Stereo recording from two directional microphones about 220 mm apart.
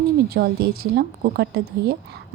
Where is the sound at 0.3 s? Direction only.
45° right (ahead or behind).